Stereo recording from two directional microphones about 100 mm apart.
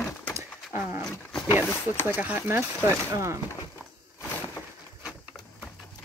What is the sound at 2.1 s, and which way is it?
Speech, 15° right (ahead or behind).